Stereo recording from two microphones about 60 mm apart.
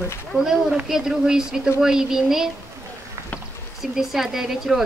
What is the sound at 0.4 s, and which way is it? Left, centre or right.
Speech, centre.